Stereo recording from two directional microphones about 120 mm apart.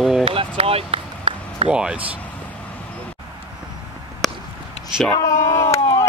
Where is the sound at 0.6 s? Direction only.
55° right (ahead or behind).